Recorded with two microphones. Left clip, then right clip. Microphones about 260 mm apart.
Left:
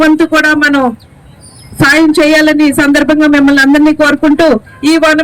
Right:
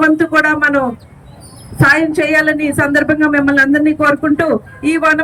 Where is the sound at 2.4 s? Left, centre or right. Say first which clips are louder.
Left 5 dB; left.